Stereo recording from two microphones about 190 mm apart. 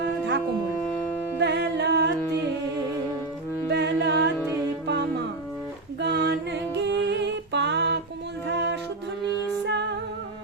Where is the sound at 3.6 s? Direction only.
60° right (ahead or behind).